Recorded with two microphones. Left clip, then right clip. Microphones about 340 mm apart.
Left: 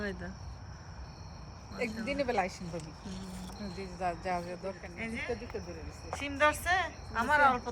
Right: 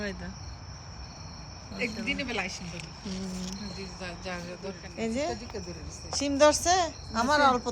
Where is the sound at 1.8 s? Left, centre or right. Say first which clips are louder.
Right 2 dB; centre.